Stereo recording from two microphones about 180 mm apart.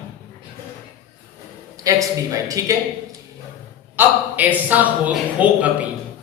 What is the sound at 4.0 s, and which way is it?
Speech, 10° right (ahead or behind).